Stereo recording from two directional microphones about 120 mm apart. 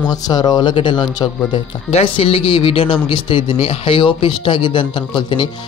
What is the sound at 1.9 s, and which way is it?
Speech, 50° left (ahead or behind).